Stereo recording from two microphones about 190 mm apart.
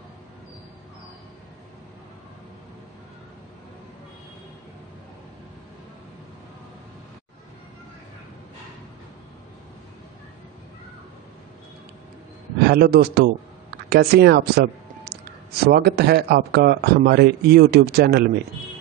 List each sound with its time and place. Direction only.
12.6 s speech: 55° right (ahead or behind)